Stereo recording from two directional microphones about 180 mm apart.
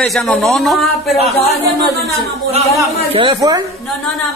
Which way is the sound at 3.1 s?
25° right (ahead or behind).